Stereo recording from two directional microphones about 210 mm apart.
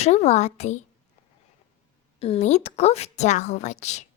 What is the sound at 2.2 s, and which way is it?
A child's voice, 30° left (ahead or behind).